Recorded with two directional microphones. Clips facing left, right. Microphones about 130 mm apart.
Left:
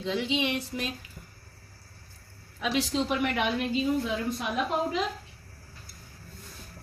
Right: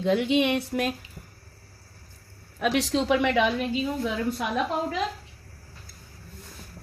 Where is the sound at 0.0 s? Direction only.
55° right (ahead or behind).